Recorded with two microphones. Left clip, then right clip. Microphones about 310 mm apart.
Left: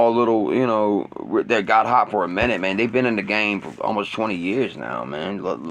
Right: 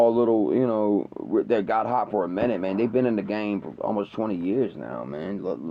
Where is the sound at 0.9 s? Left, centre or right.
Left.